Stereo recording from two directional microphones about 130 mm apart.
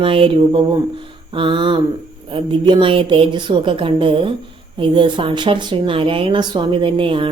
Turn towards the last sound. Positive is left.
turn(degrees=-40)  # may be behind; listen again after turning